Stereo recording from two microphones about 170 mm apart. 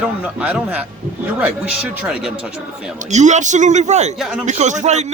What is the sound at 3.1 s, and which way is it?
Speech, 45° right (ahead or behind).